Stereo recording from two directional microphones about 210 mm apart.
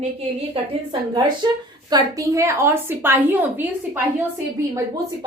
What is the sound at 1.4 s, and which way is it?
A woman's voice, 20° right (ahead or behind).